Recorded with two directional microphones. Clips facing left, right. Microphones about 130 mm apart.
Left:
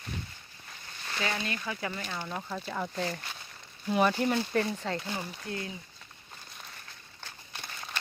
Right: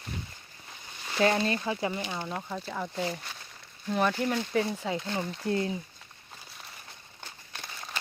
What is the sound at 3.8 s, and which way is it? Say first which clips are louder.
Speech: left 1 dB; 5° left (ahead or behind).